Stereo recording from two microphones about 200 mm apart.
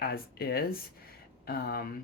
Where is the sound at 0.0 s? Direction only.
50° left (ahead or behind).